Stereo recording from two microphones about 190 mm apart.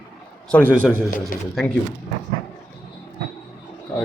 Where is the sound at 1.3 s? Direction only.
50° left (ahead or behind).